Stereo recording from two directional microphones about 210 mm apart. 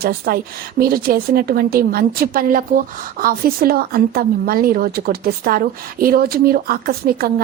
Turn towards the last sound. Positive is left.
turn(degrees=-45)  # may be behind; listen again after turning